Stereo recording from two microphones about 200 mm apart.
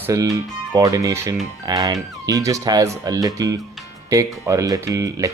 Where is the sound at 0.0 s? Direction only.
15° right (ahead or behind).